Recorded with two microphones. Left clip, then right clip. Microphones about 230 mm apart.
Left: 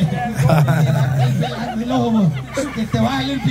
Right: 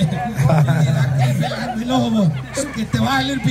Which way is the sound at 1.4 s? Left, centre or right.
Right.